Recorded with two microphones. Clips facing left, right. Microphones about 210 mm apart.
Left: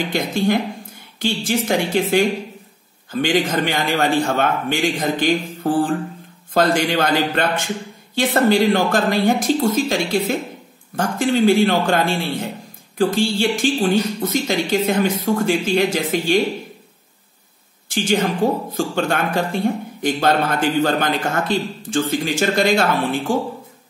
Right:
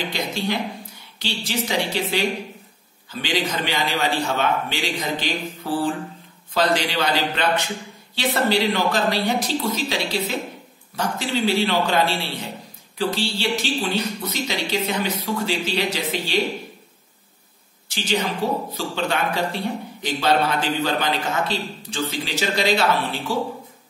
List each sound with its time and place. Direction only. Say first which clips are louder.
0.1 s speech: left 7 dB; 50° left (ahead or behind)
17.8 s speech: left 5 dB; 50° left (ahead or behind)